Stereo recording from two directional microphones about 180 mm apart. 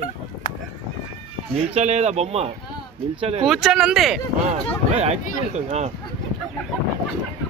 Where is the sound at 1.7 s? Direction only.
40° right (ahead or behind).